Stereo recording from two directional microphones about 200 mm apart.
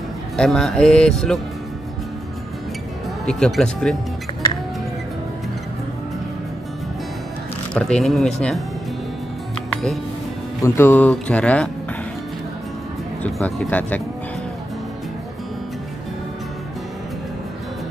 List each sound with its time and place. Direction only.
0.4 s speech: centre (ahead or behind)
3.3 s speech: centre (ahead or behind)
4.3 s music: 30° left (ahead or behind)
7.7 s speech: 5° left (ahead or behind)
10.6 s speech: 10° left (ahead or behind)
13.2 s speech: 10° left (ahead or behind)